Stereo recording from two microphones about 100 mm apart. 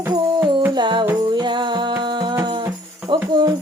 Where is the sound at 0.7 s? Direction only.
50° right (ahead or behind).